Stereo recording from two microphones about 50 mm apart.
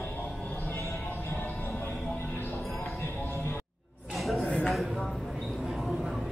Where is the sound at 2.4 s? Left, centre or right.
Left.